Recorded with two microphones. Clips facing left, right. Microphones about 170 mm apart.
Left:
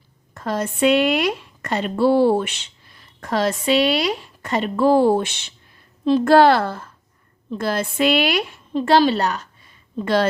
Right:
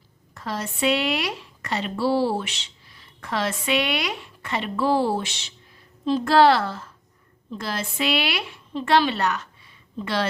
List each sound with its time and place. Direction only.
0.3 s a woman's voice: 50° left (ahead or behind)